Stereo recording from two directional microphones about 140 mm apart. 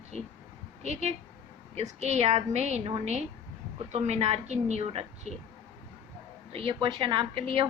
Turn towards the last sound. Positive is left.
turn(degrees=-40)  # may be behind; listen again after turning